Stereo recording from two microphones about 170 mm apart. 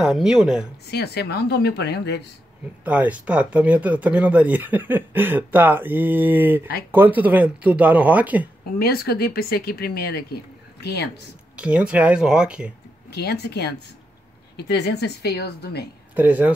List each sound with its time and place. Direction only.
0.0 s speech: 5° right (ahead or behind)
0.8 s speech: 70° left (ahead or behind)
2.8 s speech: 10° right (ahead or behind)
8.7 s speech: 65° left (ahead or behind)
10.8 s speech: 80° left
11.5 s speech: 5° right (ahead or behind)
13.1 s speech: 70° left (ahead or behind)
16.2 s speech: 10° right (ahead or behind)